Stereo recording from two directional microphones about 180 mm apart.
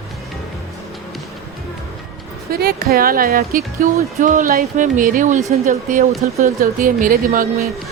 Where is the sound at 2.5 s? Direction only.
60° right (ahead or behind).